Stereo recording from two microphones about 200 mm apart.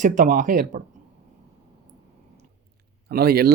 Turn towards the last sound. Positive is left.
turn(degrees=-50)  # may be behind; listen again after turning